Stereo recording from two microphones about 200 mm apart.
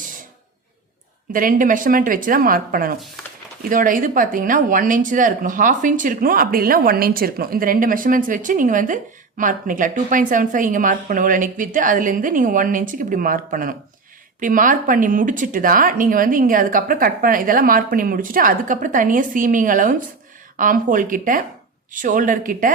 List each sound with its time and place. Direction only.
1.3 s a woman's voice: 40° right (ahead or behind)